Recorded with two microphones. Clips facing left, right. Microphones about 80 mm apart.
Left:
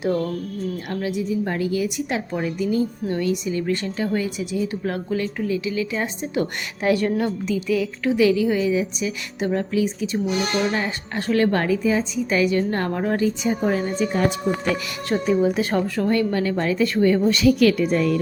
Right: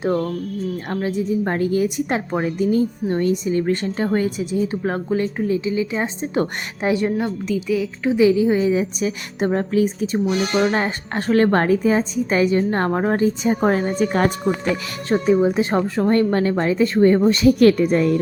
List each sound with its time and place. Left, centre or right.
1.3 s a woman's voice: right
7.1 s a woman's voice: centre
8.1 s a woman's voice: right
8.5 s a woman's voice: right
15.1 s a woman's voice: right